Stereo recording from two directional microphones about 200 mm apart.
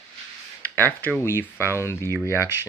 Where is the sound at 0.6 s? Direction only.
10° left (ahead or behind).